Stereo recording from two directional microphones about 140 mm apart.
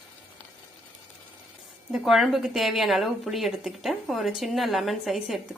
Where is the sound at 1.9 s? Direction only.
Centre (ahead or behind).